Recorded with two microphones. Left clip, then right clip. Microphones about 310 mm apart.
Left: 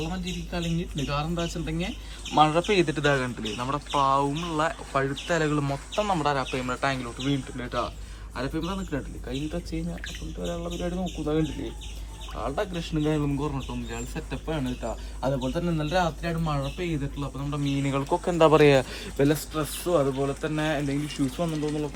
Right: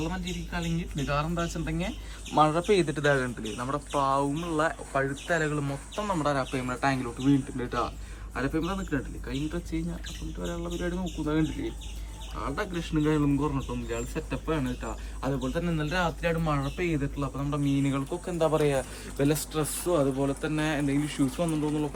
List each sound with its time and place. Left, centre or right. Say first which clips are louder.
0.0 s speech: left 1 dB; centre
18.3 s speech: left 8 dB; left
19.1 s speech: left 3 dB; centre